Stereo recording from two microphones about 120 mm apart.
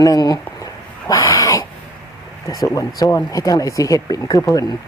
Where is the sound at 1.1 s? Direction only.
25° left (ahead or behind).